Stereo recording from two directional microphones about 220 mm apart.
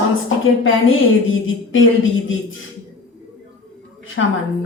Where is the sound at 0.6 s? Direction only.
65° left (ahead or behind).